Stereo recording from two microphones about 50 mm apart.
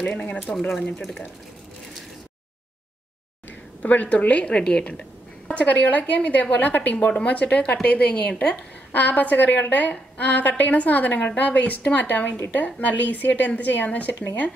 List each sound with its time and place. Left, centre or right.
0.3 s a woman's voice: left
0.6 s speech: centre
3.8 s a woman's voice: left